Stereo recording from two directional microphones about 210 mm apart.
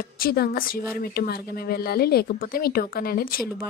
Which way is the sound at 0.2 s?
45° left (ahead or behind).